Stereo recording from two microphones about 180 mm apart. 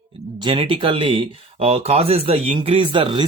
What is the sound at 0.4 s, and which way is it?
Speech, 30° right (ahead or behind).